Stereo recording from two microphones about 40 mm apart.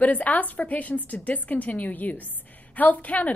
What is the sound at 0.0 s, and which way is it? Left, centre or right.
A woman's voice, left.